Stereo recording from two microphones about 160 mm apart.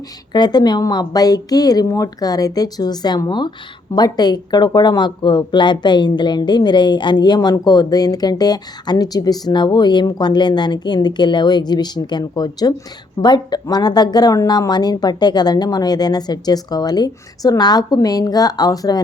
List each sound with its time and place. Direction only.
0.3 s speech: 25° left (ahead or behind)